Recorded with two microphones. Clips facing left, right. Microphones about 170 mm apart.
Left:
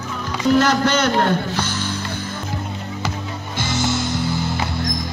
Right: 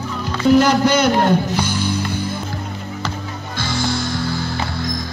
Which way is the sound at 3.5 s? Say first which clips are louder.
Even; 20° left (ahead or behind).